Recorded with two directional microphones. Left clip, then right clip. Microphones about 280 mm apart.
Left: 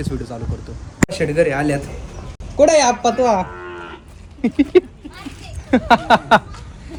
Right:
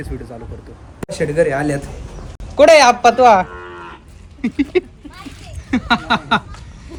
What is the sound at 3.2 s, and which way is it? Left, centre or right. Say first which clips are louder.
Speech: right 6 dB; right.